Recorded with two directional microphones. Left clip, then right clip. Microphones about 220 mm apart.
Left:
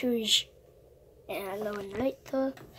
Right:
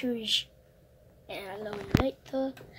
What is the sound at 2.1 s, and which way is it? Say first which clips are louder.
Speech: left 2 dB; 20° left (ahead or behind).